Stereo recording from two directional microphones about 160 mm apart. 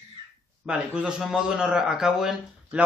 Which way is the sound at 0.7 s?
5° right (ahead or behind).